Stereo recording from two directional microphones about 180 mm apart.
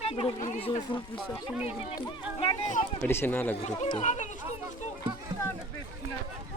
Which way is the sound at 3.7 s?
25° left (ahead or behind).